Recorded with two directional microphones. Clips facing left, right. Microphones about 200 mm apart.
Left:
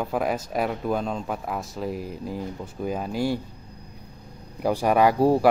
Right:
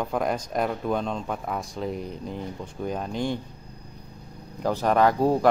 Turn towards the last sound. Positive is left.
turn(degrees=10)  # may be behind; listen again after turning